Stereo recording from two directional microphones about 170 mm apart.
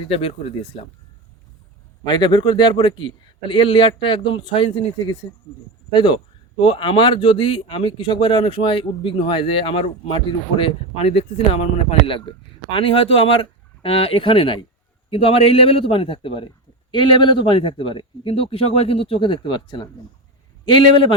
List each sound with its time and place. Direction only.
0.1 s speech: 35° left (ahead or behind)
2.0 s speech: 25° left (ahead or behind)